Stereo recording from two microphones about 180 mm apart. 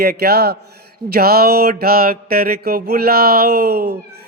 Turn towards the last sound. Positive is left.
turn(degrees=-60)  # may be behind; listen again after turning